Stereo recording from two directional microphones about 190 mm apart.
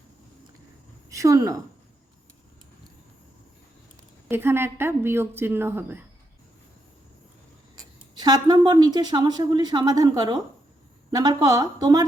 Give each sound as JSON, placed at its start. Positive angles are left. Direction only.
{"t": 1.1, "sound": "a woman's voice", "side_deg": -15}
{"t": 4.3, "sound": "a woman's voice", "side_deg": -10}
{"t": 7.8, "sound": "speech", "side_deg": -20}